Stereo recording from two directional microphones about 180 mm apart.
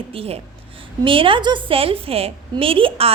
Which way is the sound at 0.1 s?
30° right (ahead or behind).